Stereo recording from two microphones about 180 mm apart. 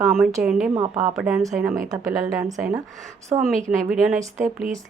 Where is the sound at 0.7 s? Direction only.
25° right (ahead or behind).